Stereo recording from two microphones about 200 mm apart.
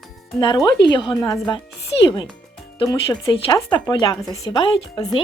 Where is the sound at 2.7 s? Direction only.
20° left (ahead or behind).